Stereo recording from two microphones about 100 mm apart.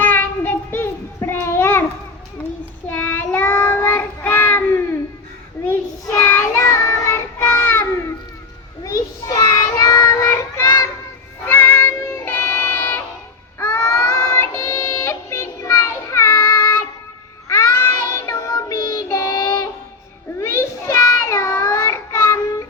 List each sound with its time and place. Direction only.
0.0 s child singing: 20° left (ahead or behind)
2.9 s child singing: 20° left (ahead or behind)
6.2 s child singing: 25° left (ahead or behind)
8.8 s child singing: 35° left (ahead or behind)
11.4 s music: 20° left (ahead or behind)
13.6 s child singing: 25° left (ahead or behind)
17.5 s child singing: 25° left (ahead or behind)
20.4 s child singing: 25° left (ahead or behind)